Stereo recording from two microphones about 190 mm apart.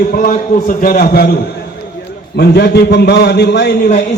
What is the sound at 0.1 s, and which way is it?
A man's voice, 45° left (ahead or behind).